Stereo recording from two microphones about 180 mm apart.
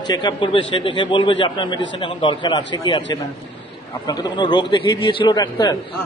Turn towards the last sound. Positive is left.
turn(degrees=20)  # may be behind; listen again after turning